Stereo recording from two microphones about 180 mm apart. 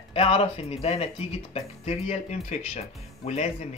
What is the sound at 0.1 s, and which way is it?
Speech, 30° left (ahead or behind).